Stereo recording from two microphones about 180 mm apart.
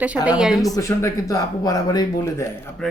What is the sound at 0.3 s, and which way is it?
Speech, 5° right (ahead or behind).